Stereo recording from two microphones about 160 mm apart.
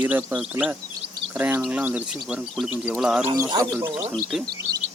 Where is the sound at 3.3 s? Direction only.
25° right (ahead or behind).